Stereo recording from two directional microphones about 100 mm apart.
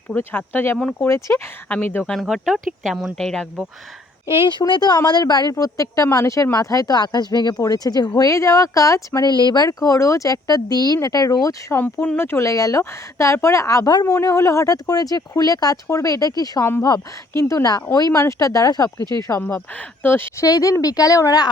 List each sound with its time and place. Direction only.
0.2 s speech: 20° left (ahead or behind)
2.2 s speech: centre (ahead or behind)
4.4 s speech: 50° left (ahead or behind); by 9.3 s 35° left (ahead or behind)
9.3 s speech: 50° left (ahead or behind)
9.6 s speech: 35° left (ahead or behind)
11.7 s speech: 25° left (ahead or behind); by 19.0 s 40° left (ahead or behind)
19.4 s speech: 20° left (ahead or behind)
20.4 s speech: 35° left (ahead or behind)